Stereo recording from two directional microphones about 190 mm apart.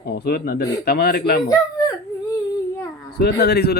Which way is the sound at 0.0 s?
55° left (ahead or behind).